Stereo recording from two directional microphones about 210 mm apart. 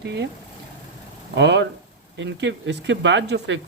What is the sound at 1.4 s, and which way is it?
Speech, 55° right (ahead or behind).